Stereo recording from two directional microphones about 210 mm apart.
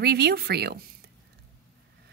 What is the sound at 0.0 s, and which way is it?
Speech, 50° right (ahead or behind).